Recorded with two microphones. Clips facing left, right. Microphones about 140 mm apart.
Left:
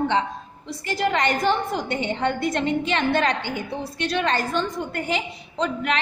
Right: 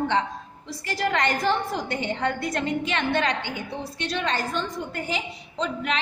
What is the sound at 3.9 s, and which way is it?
A woman's voice, 60° left (ahead or behind).